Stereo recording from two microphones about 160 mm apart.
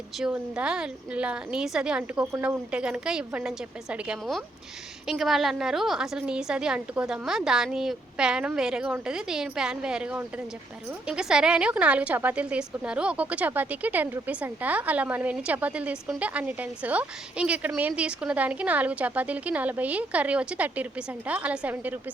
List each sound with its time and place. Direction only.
0.2 s a woman's voice: 5° right (ahead or behind)
2.3 s speech: 20° right (ahead or behind)
2.7 s a woman's voice: 5° right (ahead or behind)